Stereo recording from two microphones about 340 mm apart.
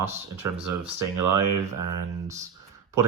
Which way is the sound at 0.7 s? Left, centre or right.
Right.